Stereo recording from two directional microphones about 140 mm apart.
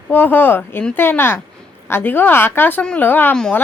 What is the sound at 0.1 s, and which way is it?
A woman's voice, 15° left (ahead or behind).